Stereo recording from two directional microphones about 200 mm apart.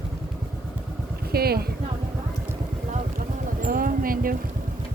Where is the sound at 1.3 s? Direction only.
50° right (ahead or behind).